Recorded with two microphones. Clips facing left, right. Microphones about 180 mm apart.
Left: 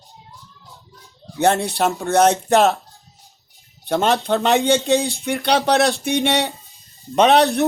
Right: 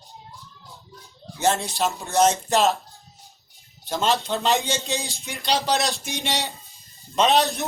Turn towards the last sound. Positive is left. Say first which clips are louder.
# left 6 dB
turn(degrees=65)  # may be behind; listen again after turning